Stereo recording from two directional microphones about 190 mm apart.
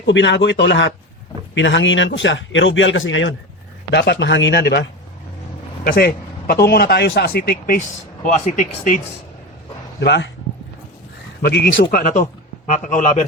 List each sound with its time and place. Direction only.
0.0 s a man's voice: 70° left (ahead or behind)
3.9 s speech: 65° left (ahead or behind)
5.8 s speech: 50° left (ahead or behind)
8.2 s speech: 40° left (ahead or behind)
10.0 s a man's voice: 65° left (ahead or behind)
11.4 s speech: 55° left (ahead or behind); by 13.2 s 40° left (ahead or behind)